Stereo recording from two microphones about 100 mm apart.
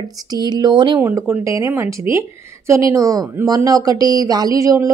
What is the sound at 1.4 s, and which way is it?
A woman's voice, 30° right (ahead or behind).